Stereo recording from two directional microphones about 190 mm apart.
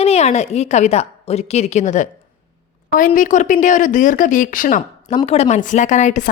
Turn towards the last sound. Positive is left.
turn(degrees=40)  # may be behind; listen again after turning